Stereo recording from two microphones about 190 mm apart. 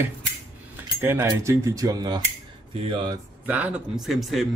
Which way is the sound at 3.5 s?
5° right (ahead or behind).